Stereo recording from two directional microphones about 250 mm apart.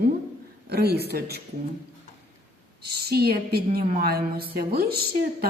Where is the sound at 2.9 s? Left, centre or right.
Right.